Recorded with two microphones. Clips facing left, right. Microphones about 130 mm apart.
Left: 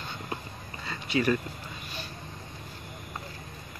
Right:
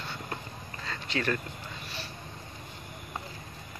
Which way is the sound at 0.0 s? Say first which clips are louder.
Left 1 dB; 15° left (ahead or behind).